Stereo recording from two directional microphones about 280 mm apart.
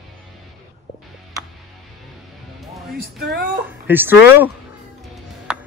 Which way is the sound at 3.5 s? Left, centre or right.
Centre.